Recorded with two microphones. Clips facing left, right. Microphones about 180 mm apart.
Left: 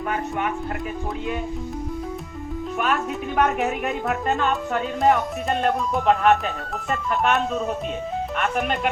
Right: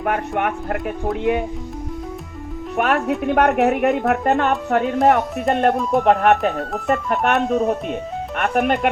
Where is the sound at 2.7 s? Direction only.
65° right (ahead or behind).